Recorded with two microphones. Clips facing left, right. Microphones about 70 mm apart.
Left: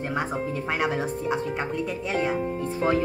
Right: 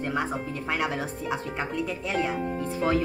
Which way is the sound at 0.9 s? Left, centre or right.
Left.